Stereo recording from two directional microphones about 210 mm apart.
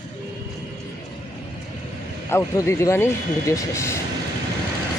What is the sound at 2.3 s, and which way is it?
Speech, 10° left (ahead or behind).